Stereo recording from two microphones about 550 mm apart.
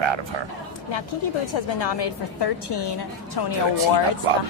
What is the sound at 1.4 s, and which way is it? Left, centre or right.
A woman's voice, left.